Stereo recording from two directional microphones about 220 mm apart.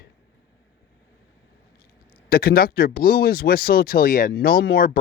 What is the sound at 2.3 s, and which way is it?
Speech, 45° left (ahead or behind).